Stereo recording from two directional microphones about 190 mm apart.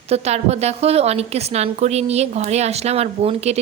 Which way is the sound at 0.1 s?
35° right (ahead or behind).